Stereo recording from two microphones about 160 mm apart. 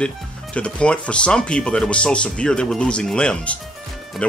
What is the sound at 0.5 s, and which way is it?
Speech, 5° left (ahead or behind).